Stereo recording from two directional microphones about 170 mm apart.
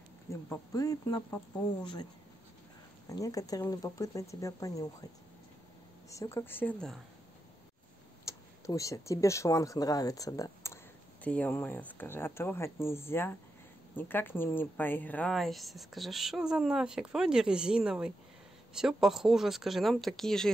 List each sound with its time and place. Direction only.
0.3 s speech: 20° left (ahead or behind)
3.1 s speech: 20° left (ahead or behind)
6.0 s speech: 20° left (ahead or behind)
8.3 s a woman's voice: 20° left (ahead or behind); by 20.5 s centre (ahead or behind)